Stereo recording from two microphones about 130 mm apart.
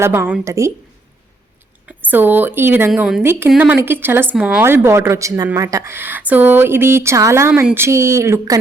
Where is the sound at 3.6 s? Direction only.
15° right (ahead or behind).